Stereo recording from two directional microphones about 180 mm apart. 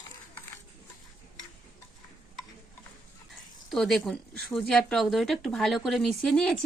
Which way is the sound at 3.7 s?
Centre (ahead or behind).